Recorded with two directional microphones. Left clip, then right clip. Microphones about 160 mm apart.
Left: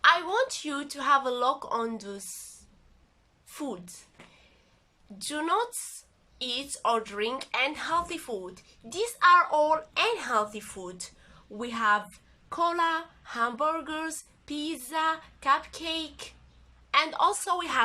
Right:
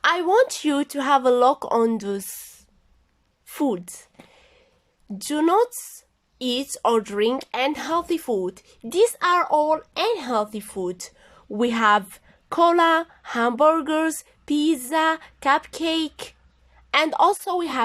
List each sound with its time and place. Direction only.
0.0 s speech: 45° right (ahead or behind)
3.4 s a woman's voice: 55° right (ahead or behind)
5.1 s speech: 45° right (ahead or behind)
9.6 s speech: 30° right (ahead or behind)